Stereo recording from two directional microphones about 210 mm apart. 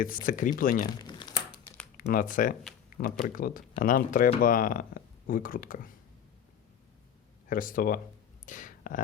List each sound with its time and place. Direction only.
0.0 s speech: 40° left (ahead or behind)
0.9 s crumpling: 20° left (ahead or behind)
2.0 s speech: 40° left (ahead or behind)
7.5 s speech: 40° left (ahead or behind)